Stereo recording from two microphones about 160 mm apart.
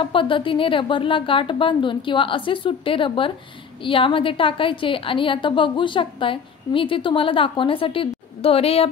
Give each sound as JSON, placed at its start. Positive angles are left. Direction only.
{"t": 0.0, "sound": "a woman's voice", "side_deg": 30}